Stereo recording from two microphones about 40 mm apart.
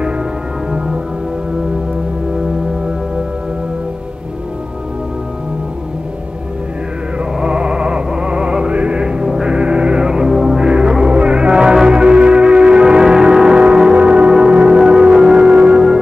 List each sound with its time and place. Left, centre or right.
0.7 s music: centre
7.3 s music: right
9.0 s music: centre